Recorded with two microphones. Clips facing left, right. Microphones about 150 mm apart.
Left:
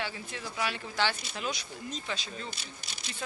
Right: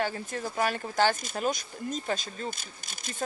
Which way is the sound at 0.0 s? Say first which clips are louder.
Right 7 dB; 45° right (ahead or behind).